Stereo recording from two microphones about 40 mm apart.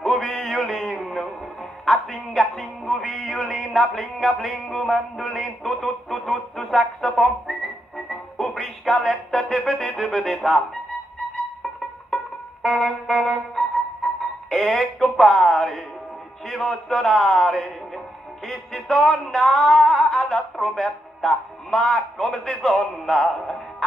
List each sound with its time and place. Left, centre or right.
0.1 s a sound: centre
0.4 s a sound: centre
1.9 s music: centre
3.2 s a sound: centre
3.5 s music: centre
5.6 s speech: centre
9.4 s music: centre
12.6 s music: centre
14.5 s music: centre
16.6 s music: centre
17.1 s speech: centre
18.5 s music: centre
20.6 s a man's voice: centre
22.4 s music: centre